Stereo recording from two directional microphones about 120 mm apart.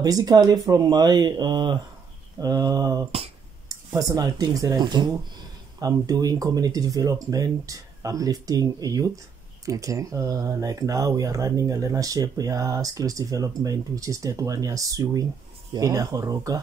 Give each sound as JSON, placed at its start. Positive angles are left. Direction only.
{"t": 0.0, "sound": "speech", "side_deg": -30}